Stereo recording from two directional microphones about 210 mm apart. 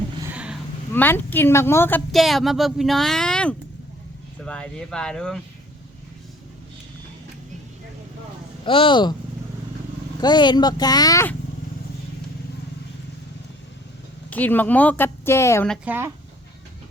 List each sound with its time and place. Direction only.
0.3 s a sound: 5° right (ahead or behind)
0.9 s speech: 10° left (ahead or behind)
2.1 s speech: centre (ahead or behind)
8.6 s speech: 25° left (ahead or behind)
10.2 s speech: 20° left (ahead or behind)
14.3 s speech: 10° left (ahead or behind)
15.8 s speech: 10° right (ahead or behind)